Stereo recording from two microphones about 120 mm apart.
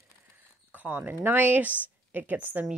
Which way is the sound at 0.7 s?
15° right (ahead or behind).